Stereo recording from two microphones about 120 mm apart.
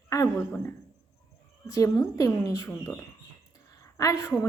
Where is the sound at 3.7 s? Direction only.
25° left (ahead or behind).